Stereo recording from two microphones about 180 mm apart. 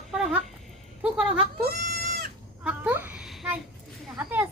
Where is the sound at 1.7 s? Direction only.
55° right (ahead or behind).